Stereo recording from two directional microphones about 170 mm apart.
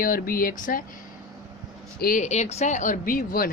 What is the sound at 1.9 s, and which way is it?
Speech, 60° left (ahead or behind).